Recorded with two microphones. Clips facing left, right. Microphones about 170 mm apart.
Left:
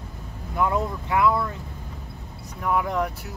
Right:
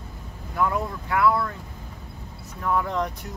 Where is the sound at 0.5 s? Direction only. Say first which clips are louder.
Left 1 dB; 20° left (ahead or behind).